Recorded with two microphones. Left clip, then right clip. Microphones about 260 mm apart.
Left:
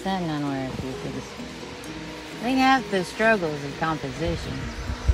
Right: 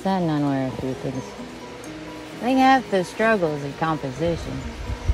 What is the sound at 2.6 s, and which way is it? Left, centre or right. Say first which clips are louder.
Speech: right 3 dB; right.